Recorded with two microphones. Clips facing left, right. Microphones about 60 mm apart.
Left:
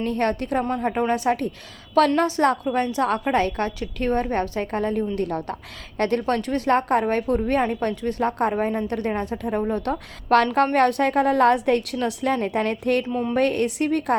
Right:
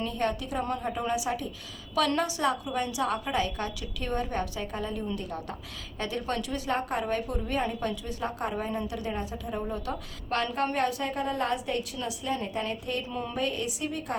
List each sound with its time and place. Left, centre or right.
0.0 s a woman's voice: left
2.0 s a woman's voice: left
13.1 s a woman's voice: left
13.3 s a woman's voice: left